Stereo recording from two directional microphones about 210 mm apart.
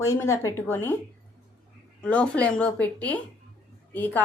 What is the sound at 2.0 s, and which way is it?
A woman's voice, 5° left (ahead or behind).